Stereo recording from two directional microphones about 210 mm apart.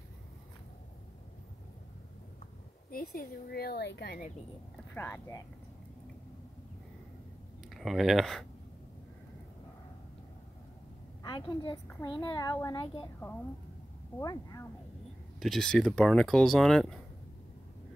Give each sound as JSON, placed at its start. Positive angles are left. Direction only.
{"t": 2.9, "sound": "speech", "side_deg": 45}
{"t": 4.9, "sound": "speech", "side_deg": 10}
{"t": 7.7, "sound": "speech", "side_deg": 0}
{"t": 11.2, "sound": "a woman's voice", "side_deg": 20}
{"t": 14.1, "sound": "speech", "side_deg": 15}
{"t": 15.3, "sound": "speech", "side_deg": 0}